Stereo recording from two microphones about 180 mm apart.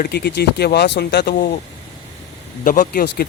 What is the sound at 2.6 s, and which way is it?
Speech, 45° left (ahead or behind).